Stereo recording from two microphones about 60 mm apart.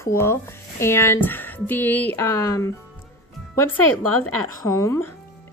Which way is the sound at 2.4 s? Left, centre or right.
Left.